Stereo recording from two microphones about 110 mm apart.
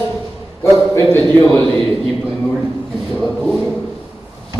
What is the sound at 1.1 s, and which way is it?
Speech, 20° left (ahead or behind).